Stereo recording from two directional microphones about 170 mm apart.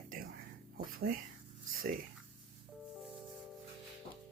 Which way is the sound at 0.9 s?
55° right (ahead or behind).